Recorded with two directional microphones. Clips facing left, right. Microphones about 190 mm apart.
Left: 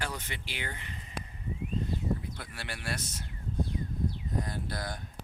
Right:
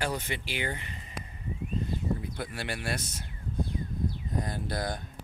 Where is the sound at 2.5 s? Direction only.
15° right (ahead or behind).